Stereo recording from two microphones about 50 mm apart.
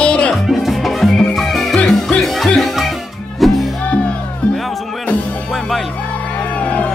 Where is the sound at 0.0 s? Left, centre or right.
Left.